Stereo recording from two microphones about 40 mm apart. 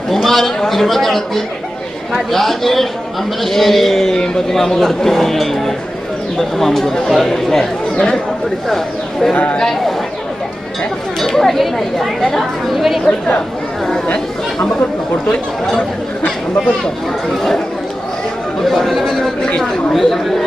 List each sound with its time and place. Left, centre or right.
0.1 s a man's voice: centre
9.3 s speech: left
9.6 s a man's voice: centre
11.2 s a man's voice: centre
13.1 s speech: left
18.6 s speech: centre